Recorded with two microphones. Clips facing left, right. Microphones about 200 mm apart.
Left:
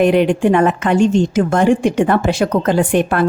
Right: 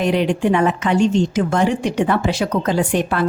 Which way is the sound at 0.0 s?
55° left (ahead or behind).